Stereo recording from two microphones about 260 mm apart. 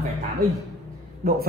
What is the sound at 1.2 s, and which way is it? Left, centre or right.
Speech, right.